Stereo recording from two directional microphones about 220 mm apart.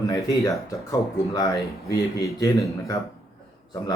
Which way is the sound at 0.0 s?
15° left (ahead or behind).